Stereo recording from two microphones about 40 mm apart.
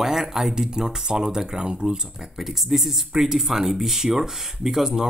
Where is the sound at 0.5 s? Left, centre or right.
Centre.